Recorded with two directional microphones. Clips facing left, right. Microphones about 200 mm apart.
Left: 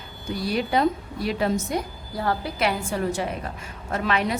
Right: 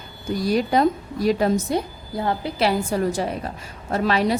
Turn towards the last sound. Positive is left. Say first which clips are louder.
# right 4 dB
turn(degrees=-35)  # may be behind; listen again after turning